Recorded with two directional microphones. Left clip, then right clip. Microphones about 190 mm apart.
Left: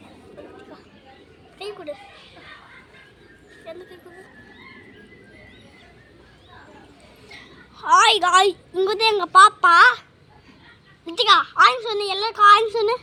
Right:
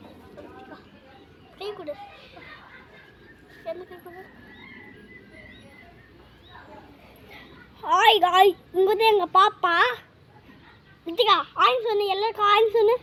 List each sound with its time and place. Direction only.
1.5 s children playing: 15° left (ahead or behind)
7.8 s a woman's voice: 15° left (ahead or behind)
11.2 s a woman's voice: 20° left (ahead or behind)